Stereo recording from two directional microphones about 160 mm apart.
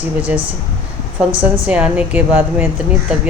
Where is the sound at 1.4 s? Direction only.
10° right (ahead or behind).